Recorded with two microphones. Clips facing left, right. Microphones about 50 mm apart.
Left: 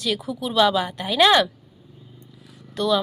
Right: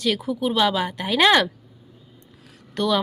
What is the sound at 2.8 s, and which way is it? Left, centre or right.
Speech, right.